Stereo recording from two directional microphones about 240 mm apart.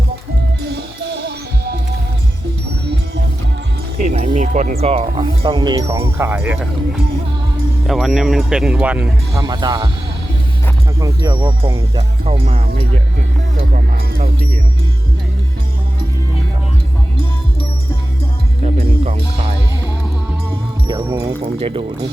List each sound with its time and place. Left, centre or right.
0.6 s music: right
4.1 s speech: right
11.0 s speech: centre
13.6 s speech: right
18.6 s music: right
20.8 s music: centre
21.6 s speech: right